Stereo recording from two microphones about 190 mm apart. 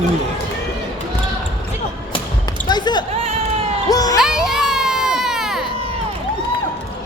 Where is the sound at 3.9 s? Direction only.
20° left (ahead or behind).